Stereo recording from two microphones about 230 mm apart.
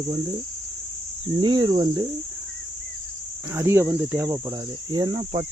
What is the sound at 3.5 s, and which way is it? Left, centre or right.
Speech, centre.